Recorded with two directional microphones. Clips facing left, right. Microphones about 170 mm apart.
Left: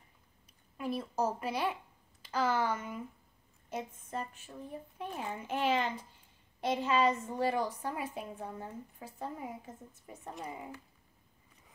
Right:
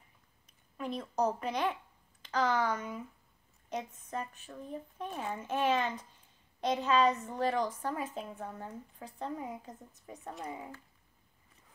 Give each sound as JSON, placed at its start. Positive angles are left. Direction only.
{"t": 0.7, "sound": "a woman's voice", "side_deg": 5}
{"t": 4.5, "sound": "a woman's voice", "side_deg": 10}